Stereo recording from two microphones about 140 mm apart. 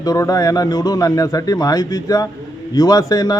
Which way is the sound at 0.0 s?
25° left (ahead or behind).